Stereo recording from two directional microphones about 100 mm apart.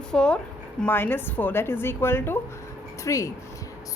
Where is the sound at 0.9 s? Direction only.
20° left (ahead or behind).